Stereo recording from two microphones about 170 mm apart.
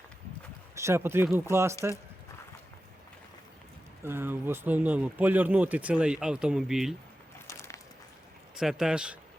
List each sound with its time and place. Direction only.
0.8 s speech: 15° right (ahead or behind)
4.0 s speech: 15° right (ahead or behind)
7.4 s a sound: 15° left (ahead or behind)
8.5 s speech: 5° right (ahead or behind)